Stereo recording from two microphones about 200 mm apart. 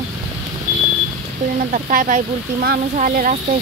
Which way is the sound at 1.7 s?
40° right (ahead or behind).